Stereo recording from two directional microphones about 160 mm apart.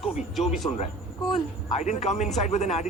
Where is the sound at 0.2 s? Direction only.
Centre (ahead or behind).